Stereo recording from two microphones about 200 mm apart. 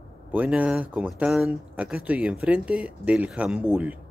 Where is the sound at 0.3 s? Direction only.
5° right (ahead or behind).